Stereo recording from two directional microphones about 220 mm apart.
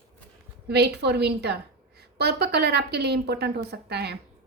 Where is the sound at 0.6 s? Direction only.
50° right (ahead or behind).